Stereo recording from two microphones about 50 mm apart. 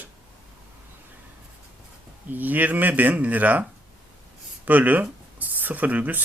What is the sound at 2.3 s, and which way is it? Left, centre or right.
Speech, right.